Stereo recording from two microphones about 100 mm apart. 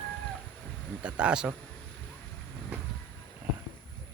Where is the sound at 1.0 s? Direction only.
10° right (ahead or behind).